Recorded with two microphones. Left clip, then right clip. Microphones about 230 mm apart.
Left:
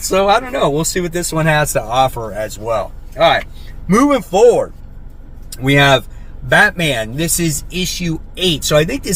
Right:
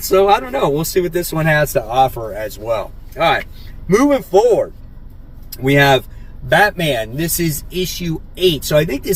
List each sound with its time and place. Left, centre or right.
0.1 s speech: centre